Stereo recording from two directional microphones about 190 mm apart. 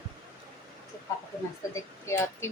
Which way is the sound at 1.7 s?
15° left (ahead or behind).